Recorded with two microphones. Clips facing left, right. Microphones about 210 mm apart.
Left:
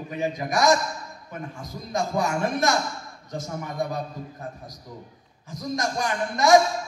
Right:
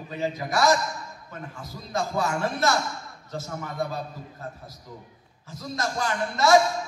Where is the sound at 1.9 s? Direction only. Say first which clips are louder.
Left 2 dB; 15° left (ahead or behind).